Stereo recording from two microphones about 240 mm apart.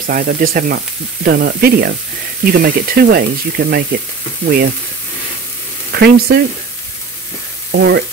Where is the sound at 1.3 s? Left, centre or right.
Right.